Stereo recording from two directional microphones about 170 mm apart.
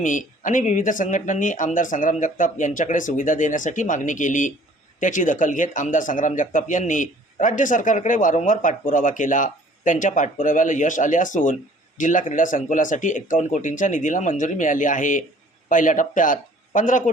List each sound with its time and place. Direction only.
0.0 s speech: 50° left (ahead or behind)